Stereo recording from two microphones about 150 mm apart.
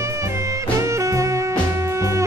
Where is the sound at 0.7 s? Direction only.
20° right (ahead or behind).